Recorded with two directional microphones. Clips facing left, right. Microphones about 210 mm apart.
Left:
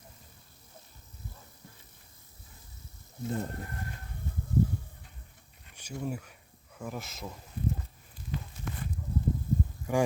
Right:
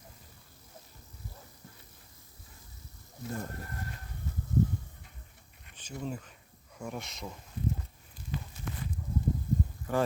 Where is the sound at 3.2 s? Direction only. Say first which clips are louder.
Left 4 dB; 20° left (ahead or behind).